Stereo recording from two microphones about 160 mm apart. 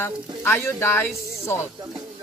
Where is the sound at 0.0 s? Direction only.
15° left (ahead or behind).